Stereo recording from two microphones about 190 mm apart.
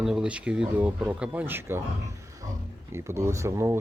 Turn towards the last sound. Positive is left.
turn(degrees=-15)  # may be behind; listen again after turning